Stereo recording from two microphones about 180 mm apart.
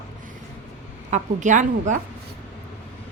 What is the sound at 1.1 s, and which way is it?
Speech, 45° right (ahead or behind).